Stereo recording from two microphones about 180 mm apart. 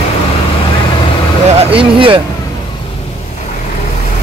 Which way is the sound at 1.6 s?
30° right (ahead or behind).